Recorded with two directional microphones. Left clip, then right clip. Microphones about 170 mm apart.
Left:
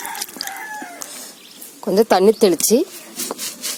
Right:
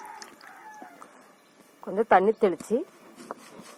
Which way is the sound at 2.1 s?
35° left (ahead or behind).